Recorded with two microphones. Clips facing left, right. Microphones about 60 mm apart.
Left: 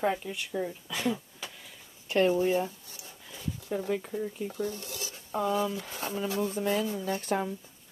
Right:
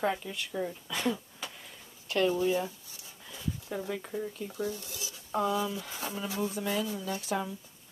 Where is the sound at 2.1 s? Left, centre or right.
Left.